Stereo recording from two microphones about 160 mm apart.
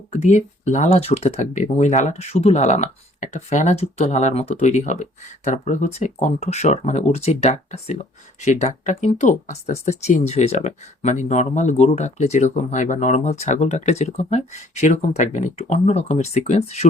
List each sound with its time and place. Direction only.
0.1 s speech: 45° left (ahead or behind)